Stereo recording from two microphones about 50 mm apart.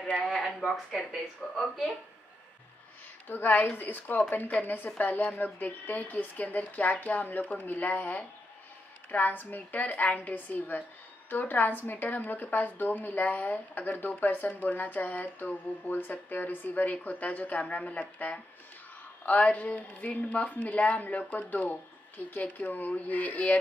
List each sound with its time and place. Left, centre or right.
0.2 s speech: centre
3.3 s a woman's voice: left